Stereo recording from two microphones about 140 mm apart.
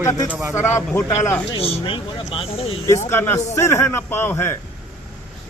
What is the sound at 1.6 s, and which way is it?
Speech, 40° left (ahead or behind).